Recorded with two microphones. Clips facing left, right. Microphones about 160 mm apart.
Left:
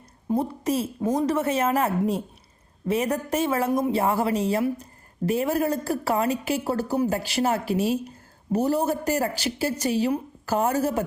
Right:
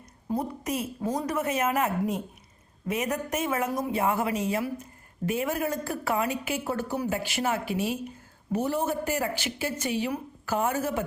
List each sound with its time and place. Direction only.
0.3 s a woman's voice: 30° left (ahead or behind)